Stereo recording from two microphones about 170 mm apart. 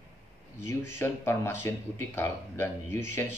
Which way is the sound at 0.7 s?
15° left (ahead or behind).